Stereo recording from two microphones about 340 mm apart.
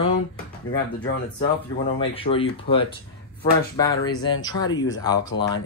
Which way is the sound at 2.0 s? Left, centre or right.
Centre.